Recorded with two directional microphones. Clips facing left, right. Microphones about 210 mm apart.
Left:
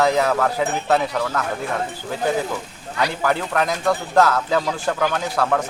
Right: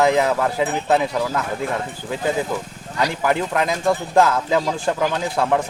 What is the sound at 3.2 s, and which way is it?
Speech, 15° right (ahead or behind).